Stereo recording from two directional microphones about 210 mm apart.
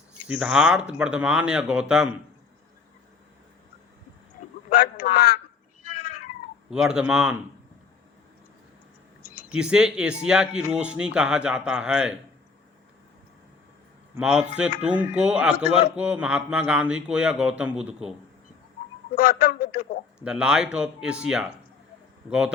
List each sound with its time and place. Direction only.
0.3 s speech: 5° right (ahead or behind)
4.7 s a man's voice: 50° left (ahead or behind)
5.8 s cat: 40° left (ahead or behind)
6.7 s speech: 5° right (ahead or behind)
9.5 s speech: 5° right (ahead or behind)
14.2 s speech: 5° right (ahead or behind)
19.1 s a man's voice: 45° left (ahead or behind)
20.2 s speech: 5° right (ahead or behind)